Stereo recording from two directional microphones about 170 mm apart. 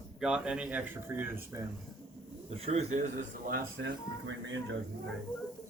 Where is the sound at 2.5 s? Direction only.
35° right (ahead or behind).